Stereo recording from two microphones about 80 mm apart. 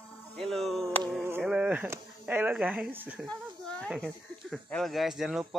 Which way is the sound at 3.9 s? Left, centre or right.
Centre.